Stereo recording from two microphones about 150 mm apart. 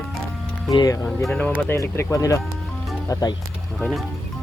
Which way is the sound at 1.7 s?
15° left (ahead or behind).